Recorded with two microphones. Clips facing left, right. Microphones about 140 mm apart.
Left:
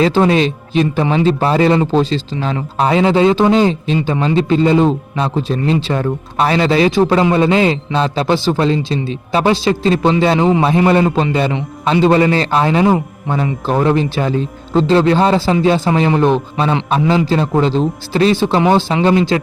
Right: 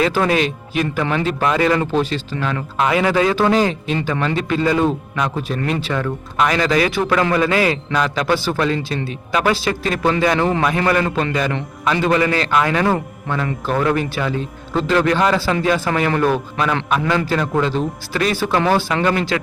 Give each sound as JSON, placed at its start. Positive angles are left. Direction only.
{"t": 0.0, "sound": "a man's voice", "side_deg": 25}
{"t": 17.0, "sound": "a man's voice", "side_deg": 15}
{"t": 17.2, "sound": "a man's voice", "side_deg": 25}